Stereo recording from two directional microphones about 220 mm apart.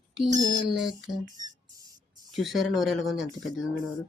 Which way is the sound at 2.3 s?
Centre (ahead or behind).